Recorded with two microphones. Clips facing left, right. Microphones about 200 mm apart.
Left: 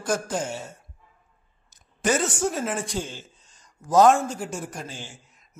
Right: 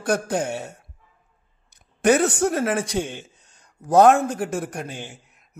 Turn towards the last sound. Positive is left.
turn(degrees=-60)  # may be behind; listen again after turning